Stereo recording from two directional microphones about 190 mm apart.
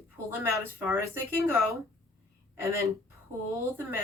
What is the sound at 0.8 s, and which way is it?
Speech, 15° right (ahead or behind).